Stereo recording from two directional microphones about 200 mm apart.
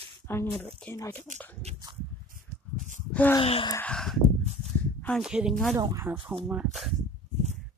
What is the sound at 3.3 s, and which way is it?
Speech, 25° left (ahead or behind).